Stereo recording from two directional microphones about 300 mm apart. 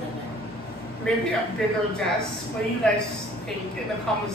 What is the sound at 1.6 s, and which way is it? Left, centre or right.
Speech, centre.